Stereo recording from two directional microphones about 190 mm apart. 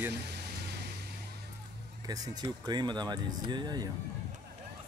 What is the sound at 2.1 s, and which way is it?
Speech, 20° right (ahead or behind).